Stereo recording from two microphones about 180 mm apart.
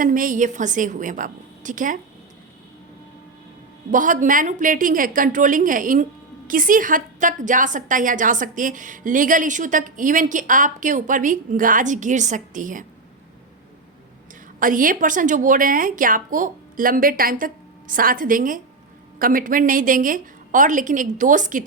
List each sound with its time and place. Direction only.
0.0 s a woman's voice: 50° right (ahead or behind)
3.9 s a woman's voice: 45° right (ahead or behind)
14.6 s a woman's voice: 50° right (ahead or behind)